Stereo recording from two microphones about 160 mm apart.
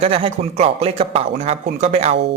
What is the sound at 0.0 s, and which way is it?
Speech, 35° right (ahead or behind).